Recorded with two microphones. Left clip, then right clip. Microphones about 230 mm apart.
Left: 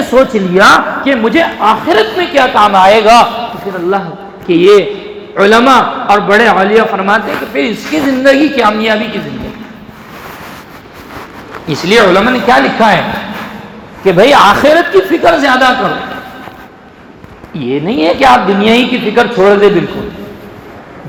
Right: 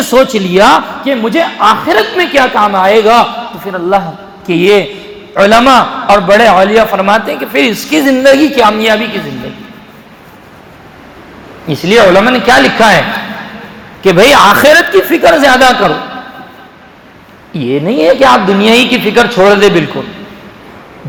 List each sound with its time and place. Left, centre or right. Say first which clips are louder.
0.1 s a man's voice: right 1 dB; right
11.7 s a man's voice: right 2 dB; right
14.0 s a man's voice: right 1 dB; right
17.5 s a man's voice: right 2 dB; right